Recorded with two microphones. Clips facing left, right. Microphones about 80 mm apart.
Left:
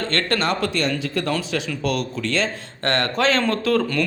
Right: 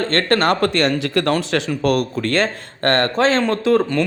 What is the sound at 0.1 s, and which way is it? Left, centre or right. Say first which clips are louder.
Speech: right 5 dB; right.